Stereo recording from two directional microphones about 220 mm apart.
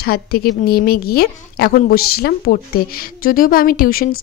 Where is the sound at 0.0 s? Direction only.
45° left (ahead or behind).